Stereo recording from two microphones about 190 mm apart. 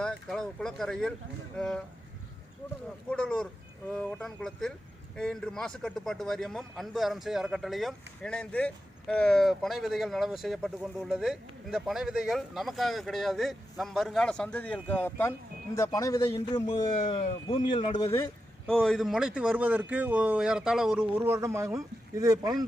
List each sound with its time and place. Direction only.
0.0 s speech: centre (ahead or behind)
3.1 s speech: 5° left (ahead or behind)
18.7 s speech: 5° left (ahead or behind)
21.2 s speech: 15° right (ahead or behind)